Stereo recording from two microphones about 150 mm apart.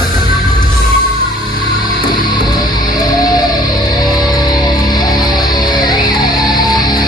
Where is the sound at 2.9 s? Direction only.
25° left (ahead or behind).